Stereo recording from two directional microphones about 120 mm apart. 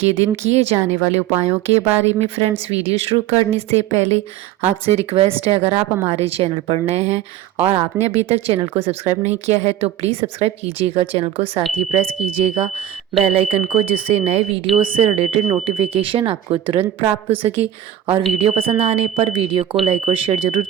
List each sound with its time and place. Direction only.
0.0 s speech: 60° right (ahead or behind)
7.5 s speech: 20° right (ahead or behind)
8.3 s speech: 55° right (ahead or behind)